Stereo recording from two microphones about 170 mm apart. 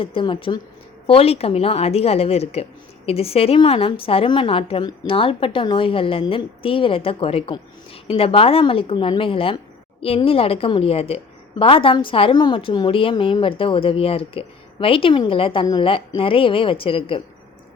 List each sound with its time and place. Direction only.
0.0 s a woman's voice: 30° left (ahead or behind)